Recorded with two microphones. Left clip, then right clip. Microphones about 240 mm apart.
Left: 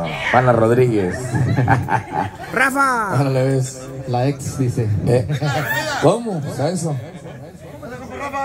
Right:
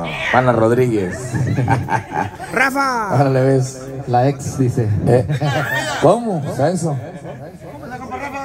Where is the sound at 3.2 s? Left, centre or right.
Right.